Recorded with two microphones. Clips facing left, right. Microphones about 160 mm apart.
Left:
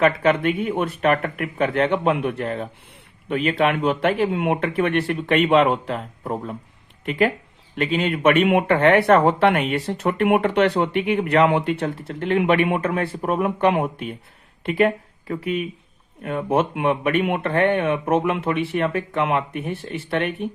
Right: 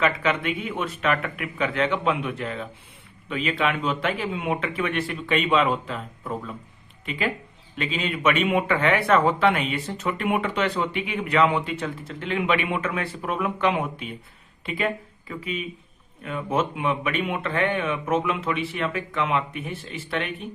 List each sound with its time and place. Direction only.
0.0 s speech: 50° left (ahead or behind)
7.0 s speech: 60° left (ahead or behind)
14.6 s speech: 65° left (ahead or behind)